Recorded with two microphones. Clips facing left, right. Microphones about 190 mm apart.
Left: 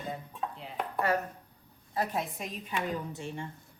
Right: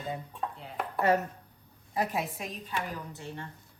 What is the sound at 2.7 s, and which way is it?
Speech, 15° left (ahead or behind).